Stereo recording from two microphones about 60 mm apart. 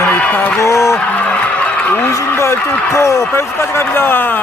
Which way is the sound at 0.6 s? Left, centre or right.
Left.